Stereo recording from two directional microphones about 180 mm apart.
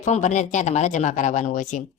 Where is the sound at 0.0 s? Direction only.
40° left (ahead or behind).